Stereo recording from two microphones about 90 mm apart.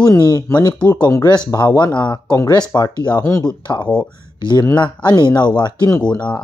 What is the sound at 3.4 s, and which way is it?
Speech, 55° left (ahead or behind).